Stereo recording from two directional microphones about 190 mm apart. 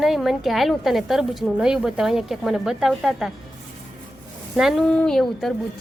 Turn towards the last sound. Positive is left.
turn(degrees=0)  # may be behind; listen again after turning